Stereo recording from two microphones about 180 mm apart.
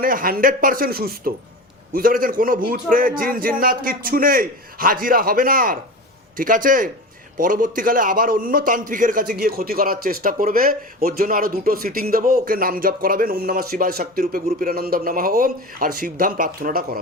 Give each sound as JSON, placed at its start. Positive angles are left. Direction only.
{"t": 0.0, "sound": "a man's voice", "side_deg": -50}